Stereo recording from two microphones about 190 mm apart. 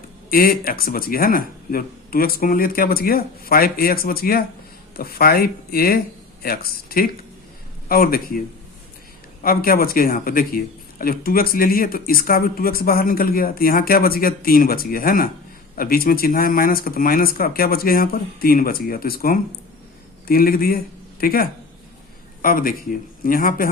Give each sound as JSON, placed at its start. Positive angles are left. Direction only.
{"t": 0.3, "sound": "speech", "side_deg": 50}
{"t": 9.4, "sound": "speech", "side_deg": 50}